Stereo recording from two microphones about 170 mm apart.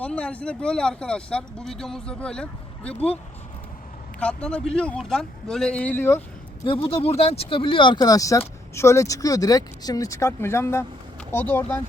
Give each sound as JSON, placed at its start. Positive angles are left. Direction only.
{"t": 0.0, "sound": "speech", "side_deg": 5}
{"t": 4.2, "sound": "a man's voice", "side_deg": 5}
{"t": 6.7, "sound": "a man's voice", "side_deg": 30}